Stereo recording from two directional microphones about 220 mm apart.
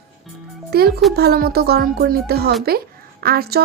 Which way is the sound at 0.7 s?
45° right (ahead or behind).